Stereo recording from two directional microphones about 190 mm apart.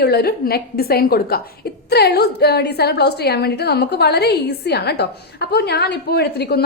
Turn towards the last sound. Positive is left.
turn(degrees=60)  # may be behind; listen again after turning